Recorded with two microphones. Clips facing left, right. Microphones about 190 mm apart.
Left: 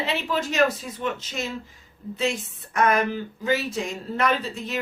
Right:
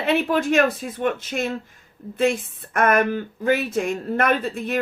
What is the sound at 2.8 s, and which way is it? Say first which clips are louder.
Speech: right 3 dB; 55° right (ahead or behind).